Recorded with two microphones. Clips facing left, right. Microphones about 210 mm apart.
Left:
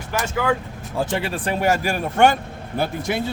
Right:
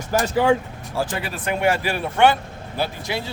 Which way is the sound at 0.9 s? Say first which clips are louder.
Left 2 dB; 25° left (ahead or behind).